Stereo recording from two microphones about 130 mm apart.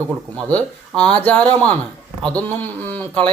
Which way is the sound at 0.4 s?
10° left (ahead or behind).